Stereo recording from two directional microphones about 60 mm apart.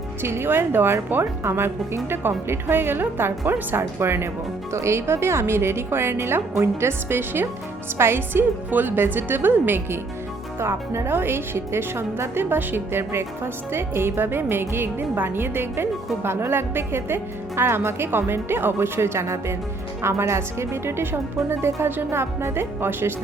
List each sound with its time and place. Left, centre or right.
0.2 s a woman's voice: right
10.6 s a woman's voice: right